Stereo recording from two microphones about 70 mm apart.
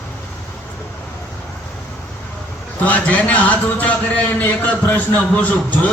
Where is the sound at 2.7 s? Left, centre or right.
Left.